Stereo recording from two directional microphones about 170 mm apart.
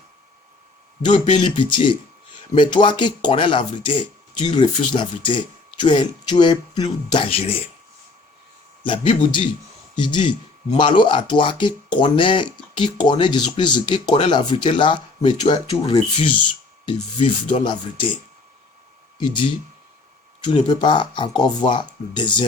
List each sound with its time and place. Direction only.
1.0 s speech: 25° left (ahead or behind)
9.9 s speech: 25° left (ahead or behind)
19.2 s speech: 25° left (ahead or behind)
20.5 s speech: 25° left (ahead or behind)